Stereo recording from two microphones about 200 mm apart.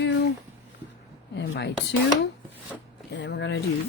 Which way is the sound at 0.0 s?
65° left (ahead or behind).